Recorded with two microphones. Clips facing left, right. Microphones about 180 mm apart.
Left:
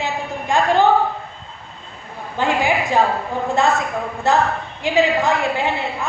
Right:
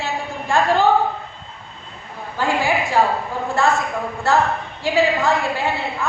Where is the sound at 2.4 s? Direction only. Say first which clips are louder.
Left 2 dB; 20° left (ahead or behind).